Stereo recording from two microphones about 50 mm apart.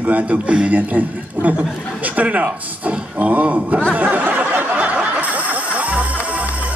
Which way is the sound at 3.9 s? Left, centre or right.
Right.